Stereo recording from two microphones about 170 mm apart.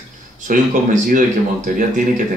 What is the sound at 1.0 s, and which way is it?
Speech, 50° right (ahead or behind).